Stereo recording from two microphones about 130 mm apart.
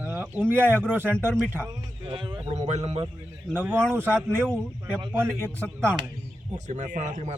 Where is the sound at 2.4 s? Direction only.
55° right (ahead or behind).